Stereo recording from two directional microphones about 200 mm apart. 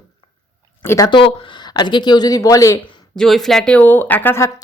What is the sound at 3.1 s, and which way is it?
Speech, centre (ahead or behind).